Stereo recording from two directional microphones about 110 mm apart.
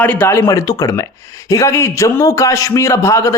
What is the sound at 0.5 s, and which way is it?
A man's voice, 30° left (ahead or behind).